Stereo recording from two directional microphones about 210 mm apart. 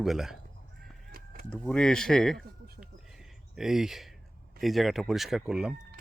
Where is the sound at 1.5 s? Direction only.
5° left (ahead or behind).